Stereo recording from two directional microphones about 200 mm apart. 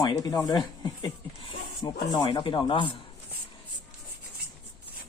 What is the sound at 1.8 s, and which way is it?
Speech, 20° left (ahead or behind).